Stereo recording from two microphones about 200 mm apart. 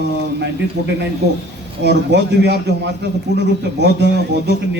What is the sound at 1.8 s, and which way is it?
A man's voice, 55° right (ahead or behind).